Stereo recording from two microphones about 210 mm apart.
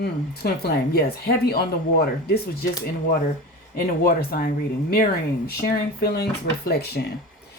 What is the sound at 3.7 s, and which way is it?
Speech, 45° left (ahead or behind).